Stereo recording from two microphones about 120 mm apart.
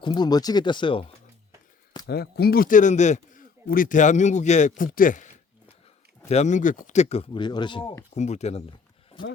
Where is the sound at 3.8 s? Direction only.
90° left.